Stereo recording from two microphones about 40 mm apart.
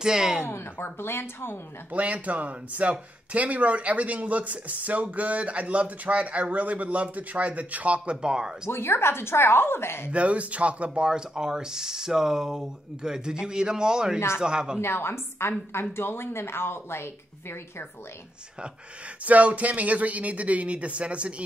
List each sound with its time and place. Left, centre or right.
0.0 s speech: centre
0.4 s a woman's voice: left
1.9 s speech: right
8.2 s speech: centre
8.6 s a woman's voice: left
10.1 s speech: right
11.1 s speech: centre
14.8 s a woman's voice: left
19.2 s speech: right